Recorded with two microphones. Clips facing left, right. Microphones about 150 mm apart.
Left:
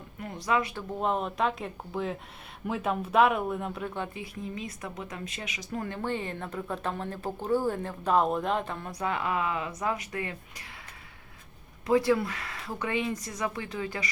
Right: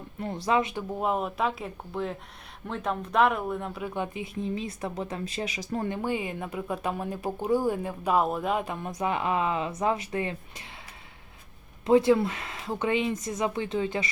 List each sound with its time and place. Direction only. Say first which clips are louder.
0.2 s speech: right 3 dB; 30° right (ahead or behind)
0.9 s speech: even; 5° right (ahead or behind)
3.9 s speech: right 4 dB; 15° right (ahead or behind); by 5.9 s 35° right (ahead or behind)
5.9 s speech: right 3 dB; 10° right (ahead or behind); by 10.3 s 25° right (ahead or behind)
11.9 s speech: right 4 dB; 25° right (ahead or behind)